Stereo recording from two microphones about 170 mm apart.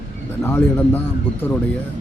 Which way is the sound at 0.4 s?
15° left (ahead or behind).